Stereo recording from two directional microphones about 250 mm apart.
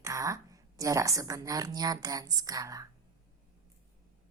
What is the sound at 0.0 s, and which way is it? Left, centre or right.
A woman's voice, centre.